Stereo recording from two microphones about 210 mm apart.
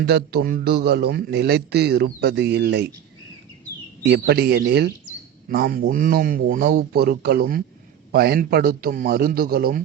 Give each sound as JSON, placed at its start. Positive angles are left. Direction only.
{"t": 0.0, "sound": "a man's voice", "side_deg": -50}
{"t": 4.1, "sound": "a man's voice", "side_deg": -50}